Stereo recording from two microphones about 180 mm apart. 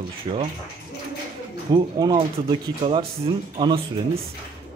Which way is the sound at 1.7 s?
25° right (ahead or behind).